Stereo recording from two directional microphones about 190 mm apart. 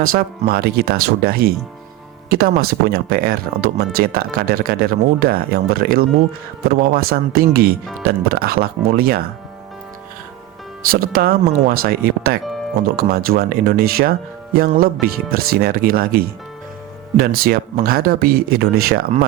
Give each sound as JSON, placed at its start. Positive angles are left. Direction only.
{"t": 0.0, "sound": "speech", "side_deg": -50}
{"t": 10.9, "sound": "speech", "side_deg": -50}